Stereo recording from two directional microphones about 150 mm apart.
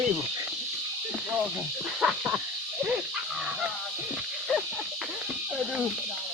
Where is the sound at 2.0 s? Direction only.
10° right (ahead or behind).